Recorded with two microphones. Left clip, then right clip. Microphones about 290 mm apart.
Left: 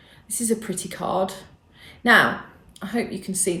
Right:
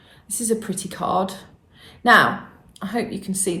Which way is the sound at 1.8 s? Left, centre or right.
Centre.